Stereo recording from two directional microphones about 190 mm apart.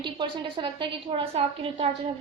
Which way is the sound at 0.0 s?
25° right (ahead or behind).